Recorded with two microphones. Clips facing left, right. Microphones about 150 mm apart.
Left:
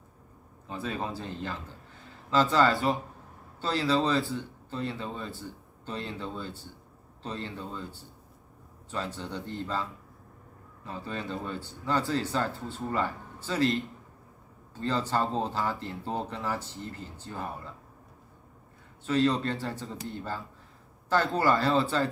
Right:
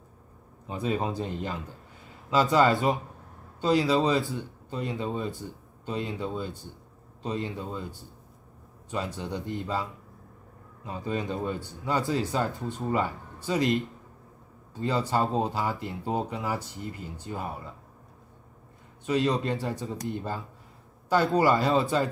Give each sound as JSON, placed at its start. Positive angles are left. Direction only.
{"t": 0.7, "sound": "speech", "side_deg": -15}
{"t": 19.0, "sound": "speech", "side_deg": -15}